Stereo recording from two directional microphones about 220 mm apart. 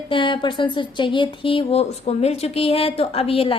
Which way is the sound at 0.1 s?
20° left (ahead or behind).